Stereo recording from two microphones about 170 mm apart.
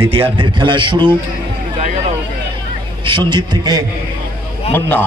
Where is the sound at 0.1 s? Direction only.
30° right (ahead or behind).